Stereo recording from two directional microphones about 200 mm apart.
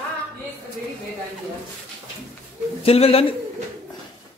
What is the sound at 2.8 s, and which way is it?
Speech, 30° left (ahead or behind).